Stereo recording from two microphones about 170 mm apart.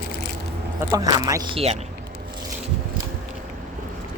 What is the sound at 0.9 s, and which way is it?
Speech, 20° right (ahead or behind).